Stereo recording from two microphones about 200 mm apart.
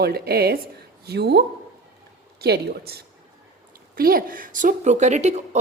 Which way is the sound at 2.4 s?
55° right (ahead or behind).